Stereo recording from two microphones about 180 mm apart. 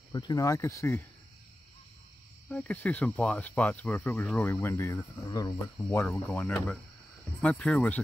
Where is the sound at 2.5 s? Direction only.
5° left (ahead or behind).